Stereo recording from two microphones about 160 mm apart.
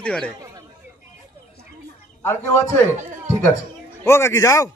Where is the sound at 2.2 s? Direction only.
15° left (ahead or behind).